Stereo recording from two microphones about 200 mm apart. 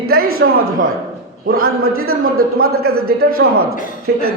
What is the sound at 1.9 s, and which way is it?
Speech, 90° right.